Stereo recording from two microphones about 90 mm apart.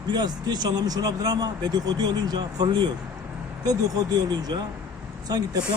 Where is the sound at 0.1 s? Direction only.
50° right (ahead or behind).